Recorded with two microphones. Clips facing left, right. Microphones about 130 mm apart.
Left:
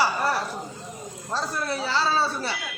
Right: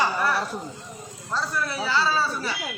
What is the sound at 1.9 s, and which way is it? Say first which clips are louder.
Speech: even; 30° left (ahead or behind).